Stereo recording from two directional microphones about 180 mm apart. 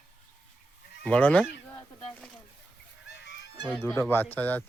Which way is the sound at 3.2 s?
70° left (ahead or behind).